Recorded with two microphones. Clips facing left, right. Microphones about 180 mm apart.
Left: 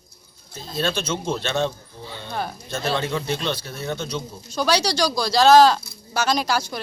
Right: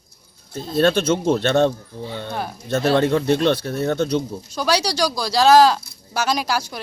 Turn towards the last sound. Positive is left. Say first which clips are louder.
# even
turn(degrees=-10)  # may be behind; listen again after turning